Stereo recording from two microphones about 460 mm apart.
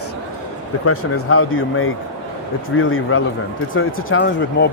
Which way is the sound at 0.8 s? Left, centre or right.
Left.